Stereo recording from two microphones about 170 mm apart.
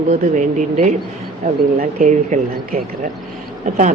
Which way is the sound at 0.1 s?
45° right (ahead or behind).